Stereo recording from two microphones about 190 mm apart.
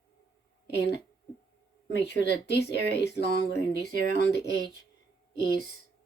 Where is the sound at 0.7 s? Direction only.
60° left (ahead or behind).